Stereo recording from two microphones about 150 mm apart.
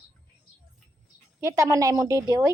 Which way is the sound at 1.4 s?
20° right (ahead or behind).